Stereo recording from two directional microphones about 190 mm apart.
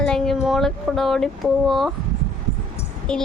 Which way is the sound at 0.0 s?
5° left (ahead or behind).